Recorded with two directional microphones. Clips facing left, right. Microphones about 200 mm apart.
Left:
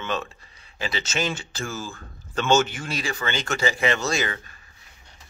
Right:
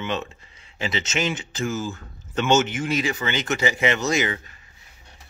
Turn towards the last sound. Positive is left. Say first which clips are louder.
# right 3 dB
turn(degrees=-20)  # may be behind; listen again after turning